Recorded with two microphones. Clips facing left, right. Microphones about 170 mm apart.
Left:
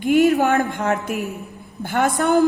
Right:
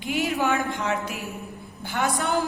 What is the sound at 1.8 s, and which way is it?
Speech, 55° left (ahead or behind).